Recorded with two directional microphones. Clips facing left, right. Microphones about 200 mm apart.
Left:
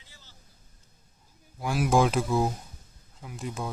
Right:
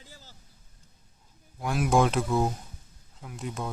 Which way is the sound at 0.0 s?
45° right (ahead or behind).